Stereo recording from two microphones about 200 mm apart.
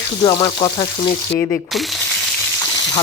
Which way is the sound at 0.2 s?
25° left (ahead or behind).